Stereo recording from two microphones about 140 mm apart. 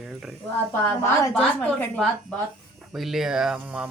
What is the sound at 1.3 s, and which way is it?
Speech, 5° left (ahead or behind).